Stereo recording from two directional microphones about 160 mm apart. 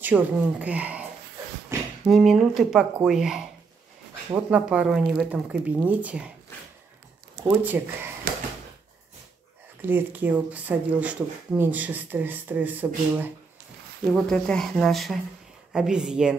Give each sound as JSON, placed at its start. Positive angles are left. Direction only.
{"t": 0.0, "sound": "speech", "side_deg": -10}
{"t": 1.7, "sound": "a sound", "side_deg": -20}
{"t": 2.0, "sound": "speech", "side_deg": 0}
{"t": 7.4, "sound": "speech", "side_deg": -15}
{"t": 9.8, "sound": "speech", "side_deg": -10}
{"t": 14.1, "sound": "speech", "side_deg": 5}